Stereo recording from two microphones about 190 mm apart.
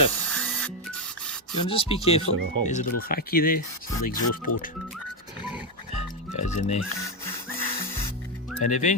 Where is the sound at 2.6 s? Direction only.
45° left (ahead or behind).